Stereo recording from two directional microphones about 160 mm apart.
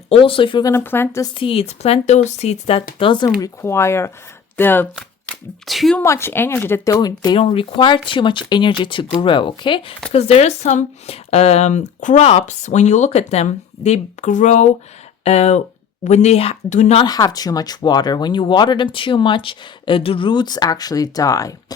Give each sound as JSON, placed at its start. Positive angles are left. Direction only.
{"t": 0.1, "sound": "speech", "side_deg": 35}
{"t": 0.7, "sound": "a woman's voice", "side_deg": 15}
{"t": 1.4, "sound": "speech", "side_deg": 35}
{"t": 3.0, "sound": "speech", "side_deg": 30}
{"t": 3.4, "sound": "a woman's voice", "side_deg": 15}
{"t": 5.6, "sound": "speech", "side_deg": 0}
{"t": 6.0, "sound": "a woman's voice", "side_deg": 15}
{"t": 17.0, "sound": "speech", "side_deg": 25}